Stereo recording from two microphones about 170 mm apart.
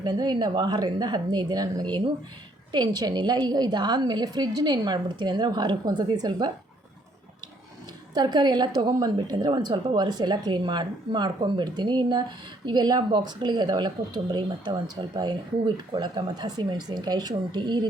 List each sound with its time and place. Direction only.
0.0 s speech: 25° right (ahead or behind)
8.1 s speech: 25° right (ahead or behind)